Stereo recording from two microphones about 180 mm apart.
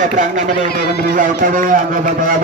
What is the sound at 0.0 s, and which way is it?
A man's voice, 45° right (ahead or behind).